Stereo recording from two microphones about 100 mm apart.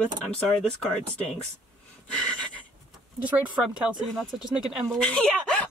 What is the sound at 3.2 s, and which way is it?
Speech, 15° right (ahead or behind).